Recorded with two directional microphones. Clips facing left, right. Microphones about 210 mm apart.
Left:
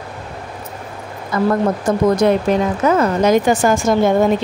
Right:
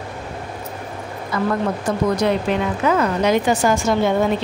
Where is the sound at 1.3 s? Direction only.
45° left (ahead or behind).